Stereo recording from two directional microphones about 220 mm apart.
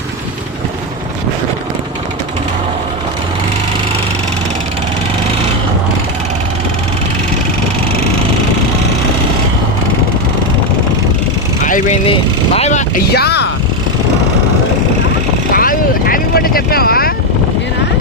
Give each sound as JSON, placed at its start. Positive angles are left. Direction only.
{"t": 11.6, "sound": "vehicle", "side_deg": 35}
{"t": 12.5, "sound": "speech", "side_deg": 30}
{"t": 13.1, "sound": "speech", "side_deg": 50}
{"t": 15.5, "sound": "vehicle", "side_deg": 40}